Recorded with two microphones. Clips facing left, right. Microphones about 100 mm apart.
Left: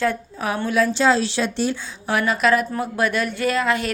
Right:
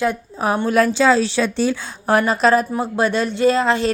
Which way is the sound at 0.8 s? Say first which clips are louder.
Right 3 dB; 55° right (ahead or behind).